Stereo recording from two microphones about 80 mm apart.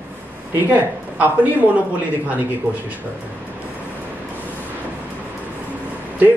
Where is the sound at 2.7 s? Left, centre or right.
Centre.